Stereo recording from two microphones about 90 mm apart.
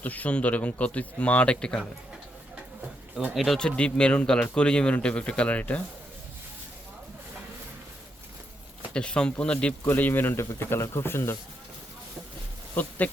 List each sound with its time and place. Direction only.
0.0 s speech: 20° left (ahead or behind)
3.3 s speech: centre (ahead or behind)
8.9 s a man's voice: 10° left (ahead or behind); by 11.3 s 25° left (ahead or behind)
12.7 s speech: 20° left (ahead or behind)